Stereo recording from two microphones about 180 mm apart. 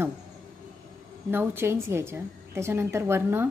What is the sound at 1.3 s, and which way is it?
A woman's voice, 10° right (ahead or behind).